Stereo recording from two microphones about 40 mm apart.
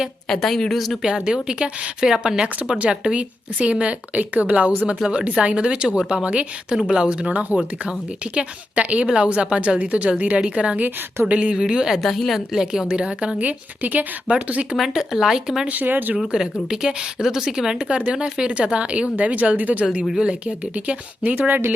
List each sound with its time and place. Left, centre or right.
0.3 s a woman's voice: centre
1.0 s a woman's voice: centre
8.4 s a woman's voice: right
12.0 s a woman's voice: centre
12.5 s speech: centre
12.9 s a woman's voice: right
13.4 s a woman's voice: right
14.9 s speech: centre
15.7 s speech: right
16.3 s speech: centre
17.8 s a woman's voice: right
19.8 s a woman's voice: right
20.7 s a woman's voice: right